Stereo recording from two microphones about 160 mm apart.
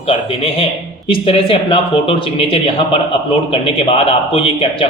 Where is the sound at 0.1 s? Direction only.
35° left (ahead or behind).